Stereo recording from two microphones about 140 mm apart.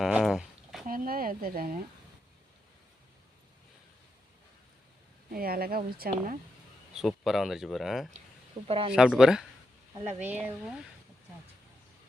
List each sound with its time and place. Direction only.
0.0 s a sound: 5° right (ahead or behind)
0.9 s a sound: 90° right
5.3 s speech: 90° right
6.9 s speech: centre (ahead or behind)
8.6 s speech: 40° right (ahead or behind)
8.9 s speech: 5° right (ahead or behind)